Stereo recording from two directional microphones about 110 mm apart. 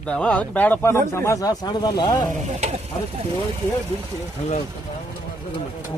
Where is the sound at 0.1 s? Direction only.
10° left (ahead or behind); by 2.2 s 40° left (ahead or behind).